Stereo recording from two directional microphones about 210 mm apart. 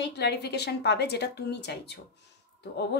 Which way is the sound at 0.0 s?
55° left (ahead or behind).